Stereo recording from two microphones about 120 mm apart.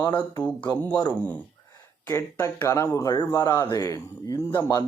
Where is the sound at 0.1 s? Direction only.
15° left (ahead or behind).